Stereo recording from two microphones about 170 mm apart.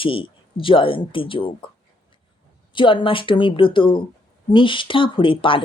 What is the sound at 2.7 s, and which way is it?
Speech, 30° left (ahead or behind).